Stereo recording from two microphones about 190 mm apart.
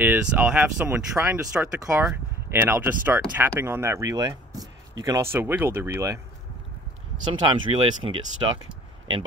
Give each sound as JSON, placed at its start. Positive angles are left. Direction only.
{"t": 0.0, "sound": "speech", "side_deg": -5}
{"t": 7.4, "sound": "speech", "side_deg": -25}